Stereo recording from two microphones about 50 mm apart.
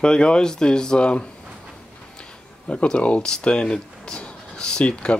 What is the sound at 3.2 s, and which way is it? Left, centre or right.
Speech, centre.